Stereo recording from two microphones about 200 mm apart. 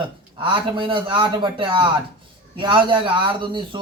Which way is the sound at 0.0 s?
25° right (ahead or behind).